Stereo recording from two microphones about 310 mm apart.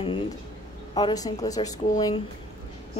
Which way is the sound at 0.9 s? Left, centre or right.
Centre.